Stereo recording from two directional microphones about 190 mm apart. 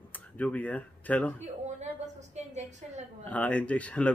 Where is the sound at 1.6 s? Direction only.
35° right (ahead or behind).